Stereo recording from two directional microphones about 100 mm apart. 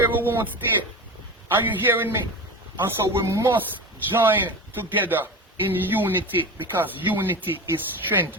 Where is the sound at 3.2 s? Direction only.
30° right (ahead or behind).